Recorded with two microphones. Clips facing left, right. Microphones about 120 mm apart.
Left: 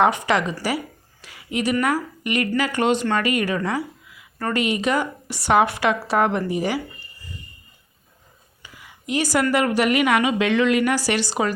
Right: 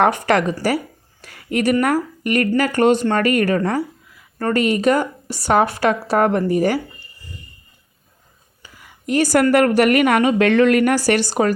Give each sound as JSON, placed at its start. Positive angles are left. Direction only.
{"t": 0.0, "sound": "speech", "side_deg": -55}
{"t": 1.2, "sound": "a sound", "side_deg": -50}
{"t": 1.8, "sound": "speech", "side_deg": -50}
{"t": 8.6, "sound": "speech", "side_deg": -50}